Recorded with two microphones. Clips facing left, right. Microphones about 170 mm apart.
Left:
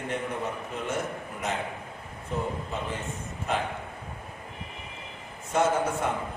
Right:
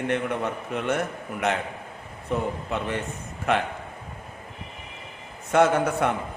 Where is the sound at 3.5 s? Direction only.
70° right (ahead or behind).